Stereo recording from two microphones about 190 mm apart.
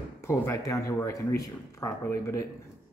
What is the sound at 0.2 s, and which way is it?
Speech, 15° left (ahead or behind).